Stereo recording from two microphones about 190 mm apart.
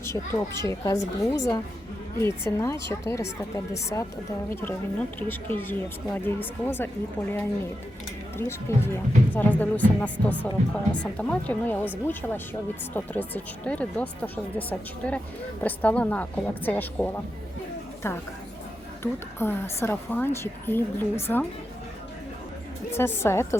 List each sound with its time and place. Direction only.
0.0 s a child's voice: 15° left (ahead or behind)
2.1 s speech: 25° right (ahead or behind)
2.6 s speech: 15° left (ahead or behind)
12.9 s speech: 10° left (ahead or behind)
19.4 s speech: 10° left (ahead or behind)
22.9 s speech: 10° left (ahead or behind)